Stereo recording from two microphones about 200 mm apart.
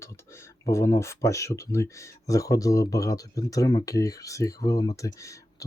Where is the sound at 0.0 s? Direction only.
15° left (ahead or behind).